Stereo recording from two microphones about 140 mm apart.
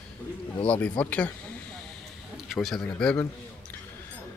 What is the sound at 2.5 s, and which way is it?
Speech, centre (ahead or behind).